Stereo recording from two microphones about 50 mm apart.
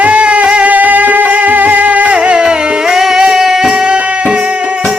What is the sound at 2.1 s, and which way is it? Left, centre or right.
Music, right.